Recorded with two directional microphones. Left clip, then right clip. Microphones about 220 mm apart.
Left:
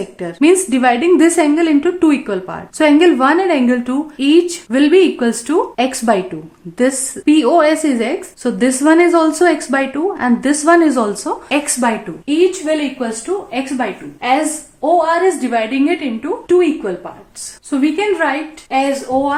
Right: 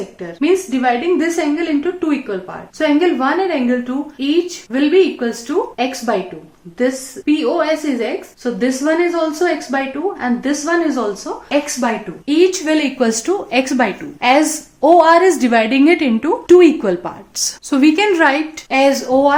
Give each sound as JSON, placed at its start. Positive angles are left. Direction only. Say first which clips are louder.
{"t": 0.2, "sound": "a woman's voice", "louder": "left 4 dB", "side_deg": 45}
{"t": 11.8, "sound": "a woman's voice", "louder": "left 5 dB", "side_deg": 25}
{"t": 12.2, "sound": "a woman's voice", "louder": "right 1 dB", "side_deg": -10}
{"t": 13.0, "sound": "a woman's voice", "louder": "right 4 dB", "side_deg": -40}